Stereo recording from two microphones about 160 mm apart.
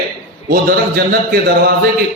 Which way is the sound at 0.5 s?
75° right (ahead or behind).